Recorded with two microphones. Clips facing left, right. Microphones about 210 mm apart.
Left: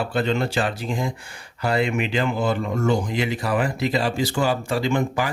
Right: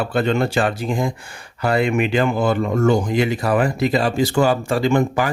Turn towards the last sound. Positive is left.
turn(degrees=-50)  # may be behind; listen again after turning